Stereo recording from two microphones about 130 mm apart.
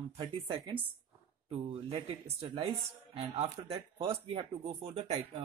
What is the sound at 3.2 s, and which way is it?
Speech, 50° right (ahead or behind).